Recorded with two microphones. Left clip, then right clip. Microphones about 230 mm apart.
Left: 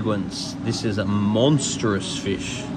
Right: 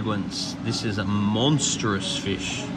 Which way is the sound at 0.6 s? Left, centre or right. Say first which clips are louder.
Left 5 dB; centre.